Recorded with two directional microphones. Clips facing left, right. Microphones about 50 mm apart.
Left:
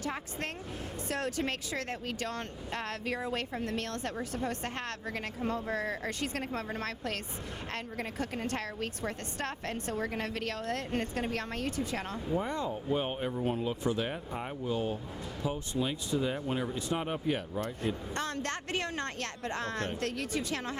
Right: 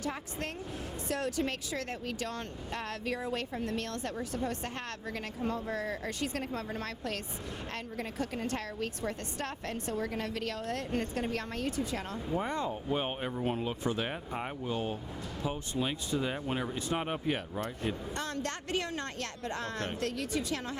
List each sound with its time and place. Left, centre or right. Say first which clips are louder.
0.0 s speech: even; left
12.4 s speech: even; right
18.1 s speech: left 1 dB; left